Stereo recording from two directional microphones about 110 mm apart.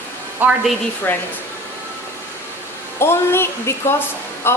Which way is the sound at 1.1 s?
20° left (ahead or behind).